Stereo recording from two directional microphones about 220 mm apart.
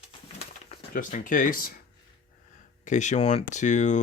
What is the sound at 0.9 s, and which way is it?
Speech, 35° left (ahead or behind).